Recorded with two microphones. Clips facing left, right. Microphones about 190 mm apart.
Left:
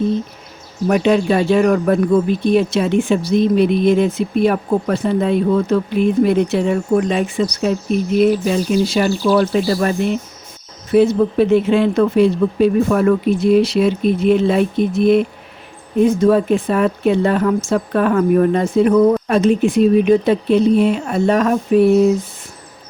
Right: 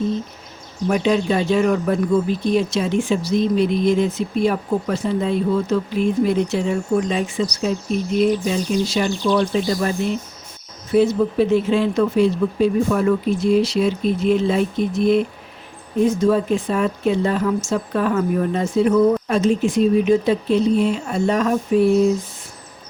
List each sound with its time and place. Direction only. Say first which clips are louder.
0.9 s speech: left 4 dB; 60° left (ahead or behind)
9.6 s speech: left 4 dB; 60° left (ahead or behind)